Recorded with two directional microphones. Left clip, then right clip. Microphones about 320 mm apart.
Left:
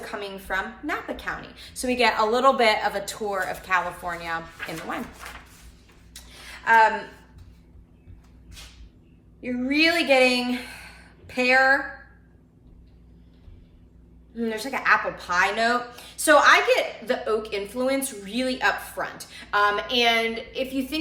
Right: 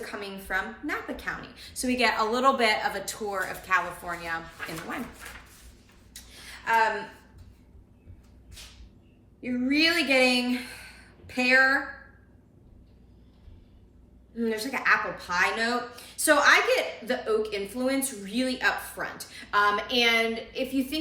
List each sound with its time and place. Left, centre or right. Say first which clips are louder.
0.0 s a woman's voice: left 3 dB; centre
6.1 s a sound: left 3 dB; centre
9.4 s speech: left 3 dB; centre
14.3 s a woman's voice: left 1 dB; centre